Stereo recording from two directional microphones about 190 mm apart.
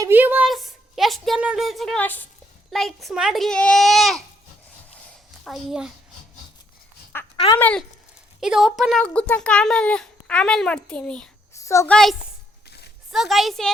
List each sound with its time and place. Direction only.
0.0 s speech: 10° right (ahead or behind)
5.5 s speech: centre (ahead or behind)
7.3 s speech: 25° left (ahead or behind)
7.6 s a child's voice: 5° left (ahead or behind)
13.1 s speech: centre (ahead or behind)